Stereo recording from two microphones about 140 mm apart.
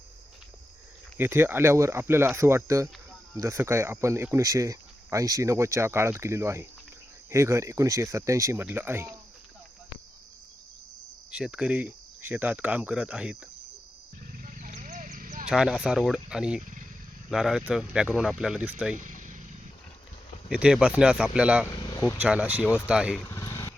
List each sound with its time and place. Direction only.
1.2 s speech: 15° right (ahead or behind)
11.3 s speech: 5° right (ahead or behind)
14.3 s a sound: 75° right (ahead or behind)
15.4 s speech: 5° right (ahead or behind)
18.9 s vehicle: 65° right (ahead or behind)
20.5 s speech: 5° right (ahead or behind)
23.2 s vehicle: 25° left (ahead or behind)